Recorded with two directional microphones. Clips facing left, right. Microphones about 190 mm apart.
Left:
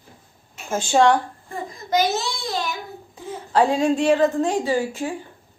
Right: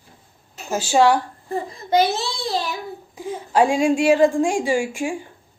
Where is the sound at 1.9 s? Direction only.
30° right (ahead or behind).